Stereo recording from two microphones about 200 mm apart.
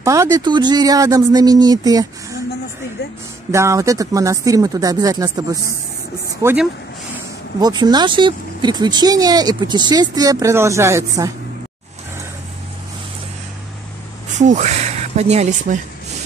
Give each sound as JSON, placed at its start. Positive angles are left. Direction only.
{"t": 0.0, "sound": "speech", "side_deg": -15}
{"t": 3.5, "sound": "speech", "side_deg": -15}
{"t": 6.4, "sound": "speech", "side_deg": -5}
{"t": 7.6, "sound": "speech", "side_deg": -20}
{"t": 14.4, "sound": "speech", "side_deg": -35}